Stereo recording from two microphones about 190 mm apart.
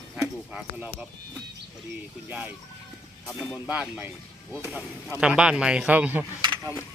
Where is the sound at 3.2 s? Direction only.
5° left (ahead or behind).